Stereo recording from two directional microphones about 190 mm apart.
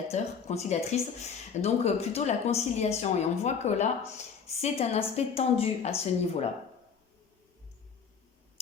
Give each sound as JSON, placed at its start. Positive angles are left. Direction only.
{"t": 0.1, "sound": "speech", "side_deg": 35}